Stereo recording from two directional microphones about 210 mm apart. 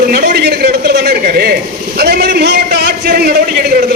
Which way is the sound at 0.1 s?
50° right (ahead or behind).